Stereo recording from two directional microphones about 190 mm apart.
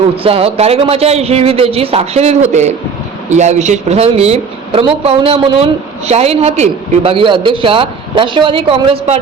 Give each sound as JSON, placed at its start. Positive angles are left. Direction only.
{"t": 0.2, "sound": "a man's voice", "side_deg": -30}